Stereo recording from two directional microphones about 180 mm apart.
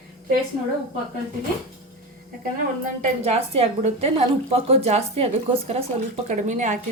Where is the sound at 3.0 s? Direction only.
35° right (ahead or behind).